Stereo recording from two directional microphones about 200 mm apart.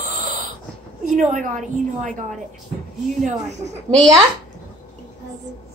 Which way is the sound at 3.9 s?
15° right (ahead or behind).